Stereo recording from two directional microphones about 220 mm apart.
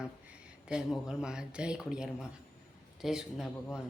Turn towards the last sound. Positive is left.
turn(degrees=0)  # may be behind; listen again after turning